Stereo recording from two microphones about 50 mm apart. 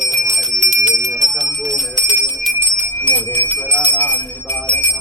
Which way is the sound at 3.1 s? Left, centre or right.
Left.